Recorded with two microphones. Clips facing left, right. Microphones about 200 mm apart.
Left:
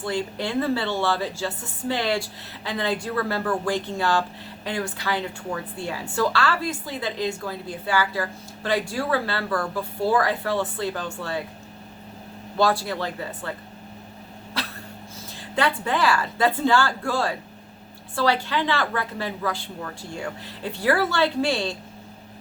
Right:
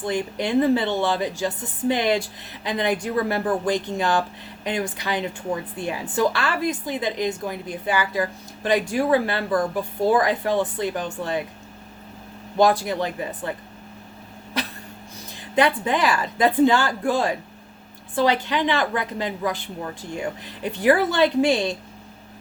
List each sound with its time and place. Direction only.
0.0 s a woman's voice: 15° right (ahead or behind)
12.5 s a woman's voice: 15° right (ahead or behind)
14.6 s dog: 20° right (ahead or behind)
15.5 s a woman's voice: 15° right (ahead or behind)